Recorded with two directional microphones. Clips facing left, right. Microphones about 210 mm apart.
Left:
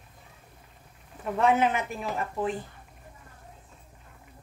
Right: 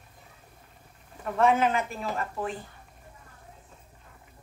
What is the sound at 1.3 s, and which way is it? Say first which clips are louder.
Speech: even; 20° left (ahead or behind).